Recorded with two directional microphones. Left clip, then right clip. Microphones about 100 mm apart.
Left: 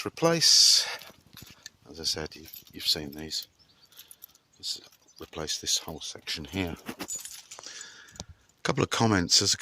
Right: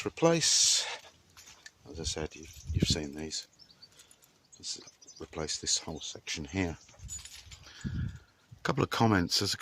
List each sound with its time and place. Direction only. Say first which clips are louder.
0.0 s speech: left 3 dB; 10° right (ahead or behind)
4.6 s speech: left 5 dB; centre (ahead or behind)
8.6 s speech: left 2 dB; 20° left (ahead or behind)